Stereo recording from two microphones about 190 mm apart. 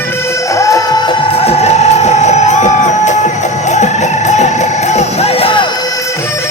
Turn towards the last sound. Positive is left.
turn(degrees=30)  # may be behind; listen again after turning